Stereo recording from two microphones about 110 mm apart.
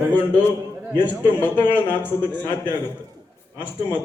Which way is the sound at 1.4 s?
15° left (ahead or behind).